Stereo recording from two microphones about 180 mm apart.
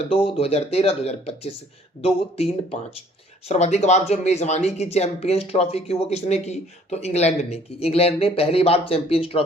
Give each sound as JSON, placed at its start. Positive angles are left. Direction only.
{"t": 0.3, "sound": "speech", "side_deg": 35}